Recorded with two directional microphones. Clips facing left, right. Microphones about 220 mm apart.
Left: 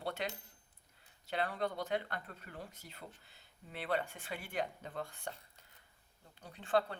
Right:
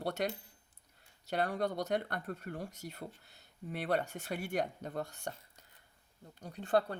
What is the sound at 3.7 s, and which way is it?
Speech, 45° right (ahead or behind).